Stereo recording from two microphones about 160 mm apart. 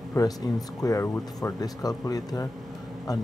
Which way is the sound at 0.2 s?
20° left (ahead or behind).